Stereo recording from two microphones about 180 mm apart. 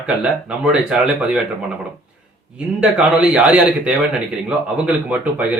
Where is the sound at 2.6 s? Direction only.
5° right (ahead or behind).